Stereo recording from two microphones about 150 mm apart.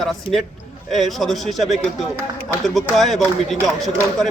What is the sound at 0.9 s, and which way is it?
Speech, centre (ahead or behind).